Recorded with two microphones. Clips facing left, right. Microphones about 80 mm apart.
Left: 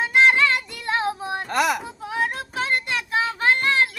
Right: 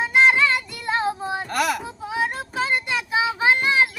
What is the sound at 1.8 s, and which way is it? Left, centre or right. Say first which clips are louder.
Child singing: even; centre.